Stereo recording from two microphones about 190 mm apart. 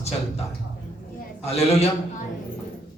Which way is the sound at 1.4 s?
35° left (ahead or behind).